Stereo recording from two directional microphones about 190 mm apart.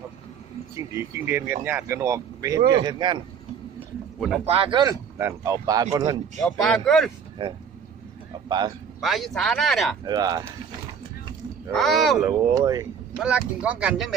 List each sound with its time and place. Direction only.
0.9 s speech: 10° right (ahead or behind)
3.8 s a sound: centre (ahead or behind)
4.4 s speech: 30° right (ahead or behind)
6.4 s speech: centre (ahead or behind)
7.4 s a man's voice: 25° right (ahead or behind)
9.0 s speech: centre (ahead or behind)
10.1 s speech: 20° right (ahead or behind)
11.7 s speech: centre (ahead or behind)
12.2 s speech: 20° right (ahead or behind)
13.1 s speech: 5° right (ahead or behind)